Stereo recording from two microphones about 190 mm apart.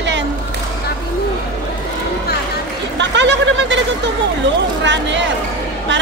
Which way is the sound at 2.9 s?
70° right (ahead or behind).